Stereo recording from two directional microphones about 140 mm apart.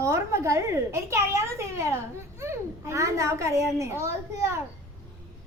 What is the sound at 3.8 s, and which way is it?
Speech, 20° right (ahead or behind).